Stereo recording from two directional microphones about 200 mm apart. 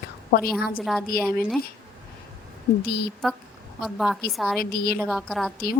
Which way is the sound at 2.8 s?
50° left (ahead or behind).